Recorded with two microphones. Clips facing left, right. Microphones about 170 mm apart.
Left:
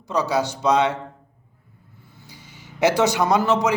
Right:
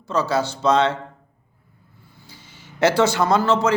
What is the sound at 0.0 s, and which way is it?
Speech, 15° left (ahead or behind).